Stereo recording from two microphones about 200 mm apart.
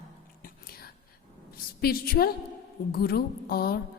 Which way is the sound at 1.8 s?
50° left (ahead or behind).